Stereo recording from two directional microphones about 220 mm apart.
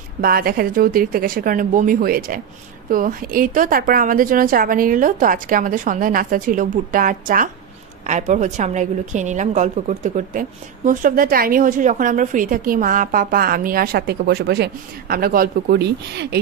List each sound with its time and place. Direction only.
0.2 s a woman's voice: 40° right (ahead or behind)